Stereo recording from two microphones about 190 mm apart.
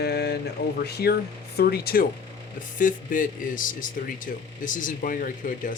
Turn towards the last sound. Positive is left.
turn(degrees=45)  # may be behind; listen again after turning